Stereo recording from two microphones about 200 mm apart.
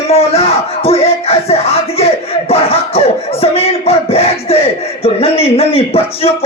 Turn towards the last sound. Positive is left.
turn(degrees=30)  # may be behind; listen again after turning